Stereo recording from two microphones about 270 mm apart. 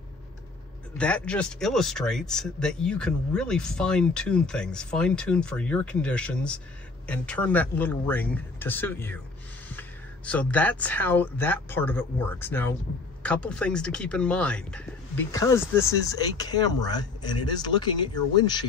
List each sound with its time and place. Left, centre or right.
0.9 s speech: centre